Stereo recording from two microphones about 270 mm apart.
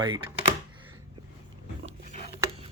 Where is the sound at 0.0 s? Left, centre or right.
Centre.